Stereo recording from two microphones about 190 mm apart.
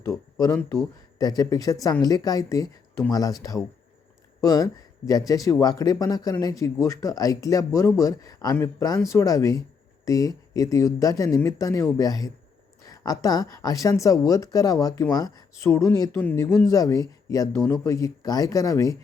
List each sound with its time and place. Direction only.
0.0 s speech: 15° left (ahead or behind)